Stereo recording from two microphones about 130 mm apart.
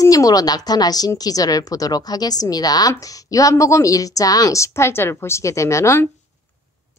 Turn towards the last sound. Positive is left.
turn(degrees=20)  # may be behind; listen again after turning